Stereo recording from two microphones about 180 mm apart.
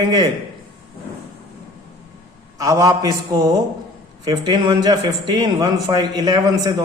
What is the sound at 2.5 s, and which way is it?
A man's voice, 20° right (ahead or behind).